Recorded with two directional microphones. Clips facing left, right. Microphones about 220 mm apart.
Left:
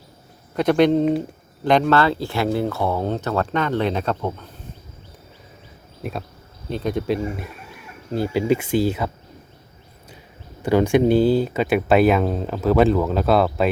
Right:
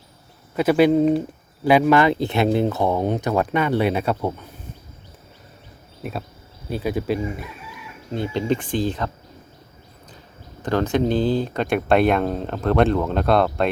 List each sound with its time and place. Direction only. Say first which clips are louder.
0.5 s speech: even; 5° right (ahead or behind)
6.0 s speech: left 1 dB; centre (ahead or behind)
7.4 s chicken: even; 45° left (ahead or behind)
8.1 s speech: left 3 dB; 5° left (ahead or behind)
10.6 s speech: left 4 dB; 10° left (ahead or behind)